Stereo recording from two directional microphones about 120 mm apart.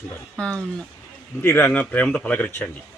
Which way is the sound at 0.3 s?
10° left (ahead or behind).